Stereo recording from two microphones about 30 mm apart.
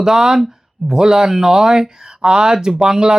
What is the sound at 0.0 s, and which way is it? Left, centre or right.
Speech, centre.